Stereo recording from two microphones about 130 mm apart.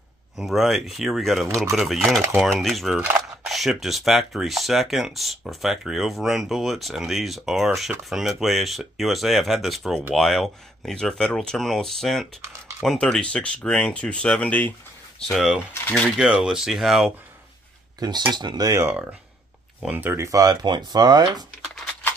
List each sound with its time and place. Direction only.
0.4 s speech: centre (ahead or behind)
16.2 s speech: 5° right (ahead or behind)
17.9 s speech: 35° right (ahead or behind)
19.8 s speech: 15° right (ahead or behind); by 21.5 s 35° right (ahead or behind)